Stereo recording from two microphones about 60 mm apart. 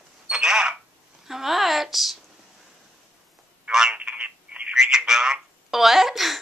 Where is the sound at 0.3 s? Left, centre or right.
Centre.